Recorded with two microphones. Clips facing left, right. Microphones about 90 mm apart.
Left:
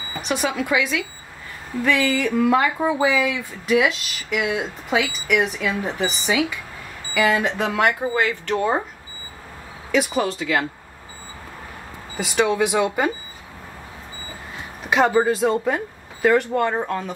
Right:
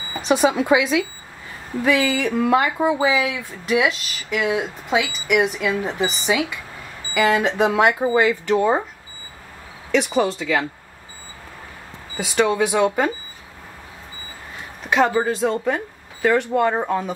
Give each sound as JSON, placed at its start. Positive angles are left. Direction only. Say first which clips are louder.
{"t": 0.2, "sound": "speech", "louder": "right 6 dB", "side_deg": -25}
{"t": 1.8, "sound": "speech", "louder": "right 1 dB", "side_deg": -10}
{"t": 7.2, "sound": "speech", "louder": "right 4 dB", "side_deg": -20}
{"t": 9.8, "sound": "speech", "louder": "right 2 dB", "side_deg": 5}
{"t": 12.2, "sound": "speech", "louder": "right 1 dB", "side_deg": 0}
{"t": 14.8, "sound": "speech", "louder": "left 1 dB", "side_deg": 5}